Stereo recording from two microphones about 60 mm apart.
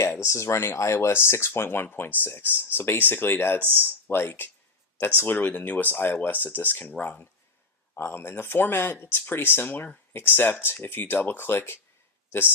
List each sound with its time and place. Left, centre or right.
0.0 s speech: left
3.6 s speech: right
4.1 s speech: left
7.9 s speech: left